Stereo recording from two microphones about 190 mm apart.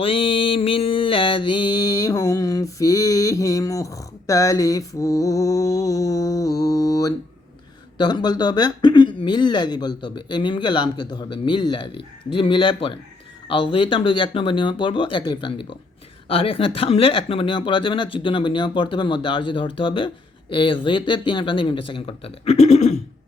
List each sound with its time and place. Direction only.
0.0 s mantra: 30° left (ahead or behind)
7.9 s speech: 20° left (ahead or behind)